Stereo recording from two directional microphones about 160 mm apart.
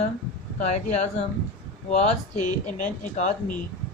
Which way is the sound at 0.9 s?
45° left (ahead or behind).